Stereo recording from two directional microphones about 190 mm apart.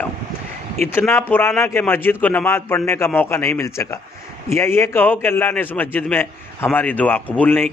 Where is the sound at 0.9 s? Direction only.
10° left (ahead or behind).